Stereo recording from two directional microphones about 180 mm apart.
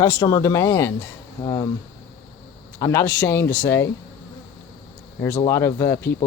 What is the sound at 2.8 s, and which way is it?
Speech, 15° left (ahead or behind).